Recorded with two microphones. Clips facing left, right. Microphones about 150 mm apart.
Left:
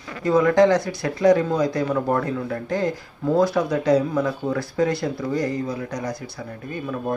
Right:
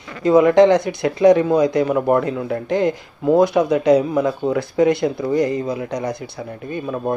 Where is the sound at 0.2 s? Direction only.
20° right (ahead or behind).